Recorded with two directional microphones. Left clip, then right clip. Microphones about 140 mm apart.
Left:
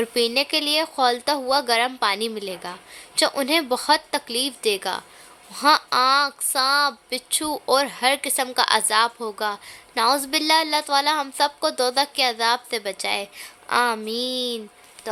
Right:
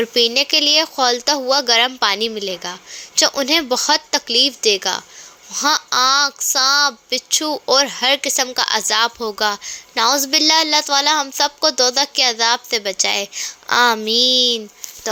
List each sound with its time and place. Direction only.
0.0 s a woman's voice: 15° right (ahead or behind)